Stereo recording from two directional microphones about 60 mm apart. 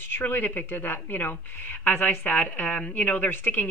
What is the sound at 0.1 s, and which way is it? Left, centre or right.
Speech, left.